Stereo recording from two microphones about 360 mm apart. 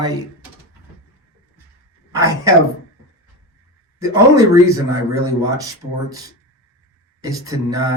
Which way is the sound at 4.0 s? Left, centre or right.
Centre.